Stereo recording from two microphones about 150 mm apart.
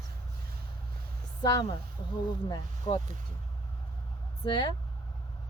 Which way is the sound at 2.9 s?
35° left (ahead or behind).